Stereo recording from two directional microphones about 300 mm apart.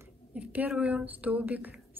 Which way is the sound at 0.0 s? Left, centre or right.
Centre.